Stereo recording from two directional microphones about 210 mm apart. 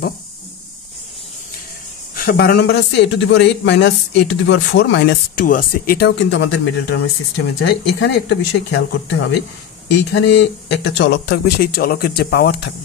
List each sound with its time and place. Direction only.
2.1 s speech: 45° left (ahead or behind)